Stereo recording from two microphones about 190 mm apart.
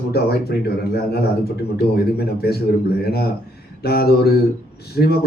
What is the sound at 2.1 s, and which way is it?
Speech, 55° left (ahead or behind).